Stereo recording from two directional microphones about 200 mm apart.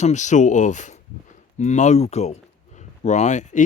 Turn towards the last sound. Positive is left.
turn(degrees=35)  # may be behind; listen again after turning